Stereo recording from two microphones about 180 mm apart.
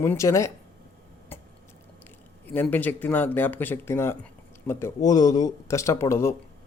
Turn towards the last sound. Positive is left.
turn(degrees=15)  # may be behind; listen again after turning